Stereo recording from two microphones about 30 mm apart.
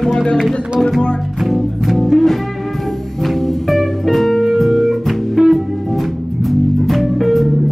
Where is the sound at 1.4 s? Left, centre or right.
Centre.